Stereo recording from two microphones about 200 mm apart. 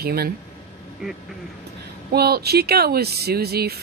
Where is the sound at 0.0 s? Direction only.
50° right (ahead or behind).